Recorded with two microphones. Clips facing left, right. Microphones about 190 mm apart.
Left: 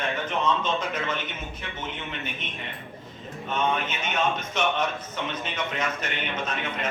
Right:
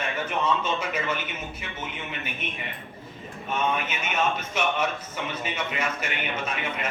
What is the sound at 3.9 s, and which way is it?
A man's voice, 10° right (ahead or behind).